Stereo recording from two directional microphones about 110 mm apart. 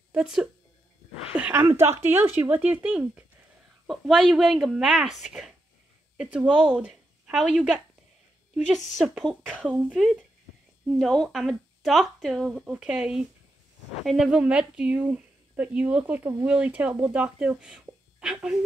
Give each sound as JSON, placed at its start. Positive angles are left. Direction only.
{"t": 0.1, "sound": "speech", "side_deg": -10}
{"t": 1.5, "sound": "speech", "side_deg": -20}
{"t": 6.5, "sound": "speech", "side_deg": -10}
{"t": 7.5, "sound": "speech", "side_deg": 0}